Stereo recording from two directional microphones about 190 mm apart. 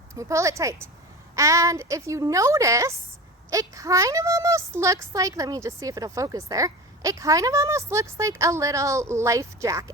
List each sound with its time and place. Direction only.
0.1 s a child's voice: 15° right (ahead or behind)